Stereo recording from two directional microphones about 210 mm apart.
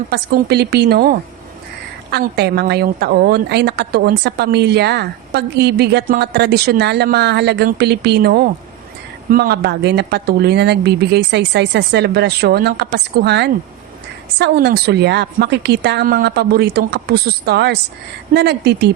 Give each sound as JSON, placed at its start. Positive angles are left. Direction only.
{"t": 0.1, "sound": "a woman's voice", "side_deg": -50}